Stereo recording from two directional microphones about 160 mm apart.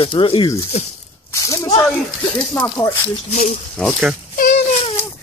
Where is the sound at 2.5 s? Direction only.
20° left (ahead or behind).